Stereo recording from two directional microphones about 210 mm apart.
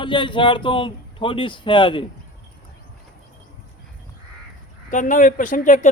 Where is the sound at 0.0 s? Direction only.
25° left (ahead or behind).